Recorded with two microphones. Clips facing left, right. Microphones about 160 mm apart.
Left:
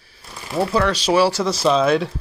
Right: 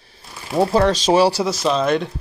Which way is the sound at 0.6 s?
40° right (ahead or behind).